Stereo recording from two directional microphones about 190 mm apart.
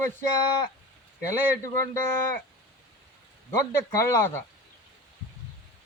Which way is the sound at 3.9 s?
15° left (ahead or behind).